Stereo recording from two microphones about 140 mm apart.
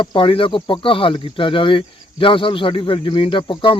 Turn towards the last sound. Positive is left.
turn(degrees=35)  # may be behind; listen again after turning